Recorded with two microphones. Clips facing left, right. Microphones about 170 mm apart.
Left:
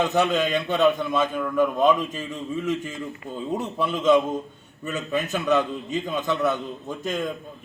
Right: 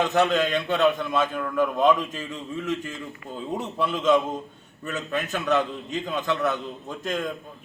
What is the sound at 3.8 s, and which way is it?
A man's voice, 15° left (ahead or behind).